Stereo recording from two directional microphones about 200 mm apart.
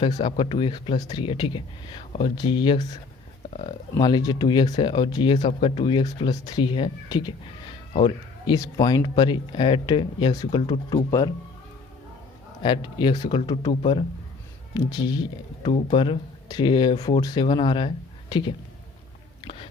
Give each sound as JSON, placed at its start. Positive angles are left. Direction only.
{"t": 0.0, "sound": "speech", "side_deg": 25}
{"t": 3.9, "sound": "speech", "side_deg": 20}
{"t": 12.6, "sound": "speech", "side_deg": 25}